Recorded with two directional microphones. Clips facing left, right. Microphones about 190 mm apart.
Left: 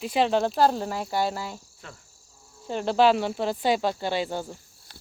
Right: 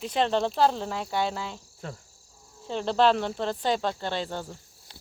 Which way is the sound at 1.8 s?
40° right (ahead or behind).